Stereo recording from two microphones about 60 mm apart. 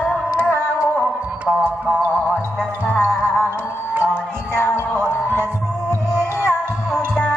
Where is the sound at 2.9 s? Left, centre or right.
Centre.